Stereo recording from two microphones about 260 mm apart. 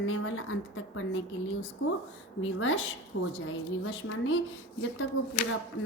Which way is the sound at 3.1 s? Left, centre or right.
Left.